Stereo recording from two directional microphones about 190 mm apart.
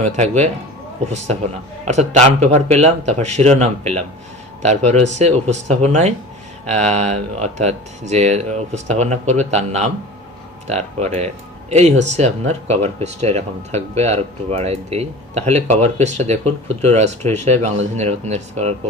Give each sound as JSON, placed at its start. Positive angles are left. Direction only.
{"t": 0.0, "sound": "speech", "side_deg": -35}
{"t": 1.9, "sound": "speech", "side_deg": -35}